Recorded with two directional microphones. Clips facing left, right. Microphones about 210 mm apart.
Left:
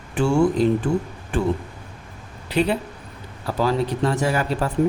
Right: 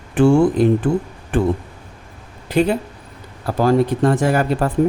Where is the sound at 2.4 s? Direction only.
45° right (ahead or behind).